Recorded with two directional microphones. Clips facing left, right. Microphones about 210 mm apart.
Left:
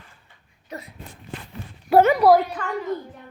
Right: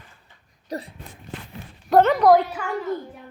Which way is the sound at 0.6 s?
35° right (ahead or behind).